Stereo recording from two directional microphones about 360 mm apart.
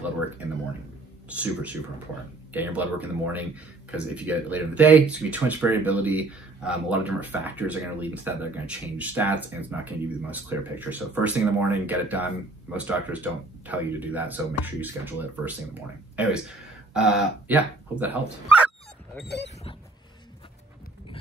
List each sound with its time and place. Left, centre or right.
1.3 s a man's voice: centre
19.2 s speech: left